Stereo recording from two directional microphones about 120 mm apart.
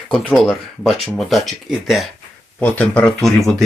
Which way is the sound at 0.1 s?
5° left (ahead or behind).